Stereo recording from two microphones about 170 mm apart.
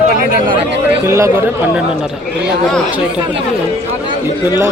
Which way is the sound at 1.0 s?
15° right (ahead or behind).